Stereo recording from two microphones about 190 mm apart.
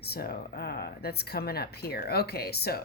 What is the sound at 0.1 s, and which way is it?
A woman's voice, 55° left (ahead or behind).